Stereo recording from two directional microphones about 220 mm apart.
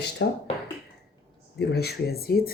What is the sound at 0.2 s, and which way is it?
Speech, 55° left (ahead or behind).